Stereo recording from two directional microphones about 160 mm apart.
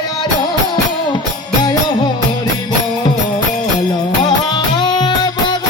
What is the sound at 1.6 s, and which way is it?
Music, 25° left (ahead or behind).